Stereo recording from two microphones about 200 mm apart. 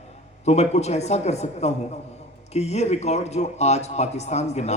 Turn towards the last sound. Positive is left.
turn(degrees=35)  # may be behind; listen again after turning